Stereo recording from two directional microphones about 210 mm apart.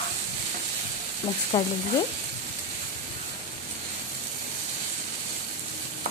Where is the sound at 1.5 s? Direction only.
15° left (ahead or behind).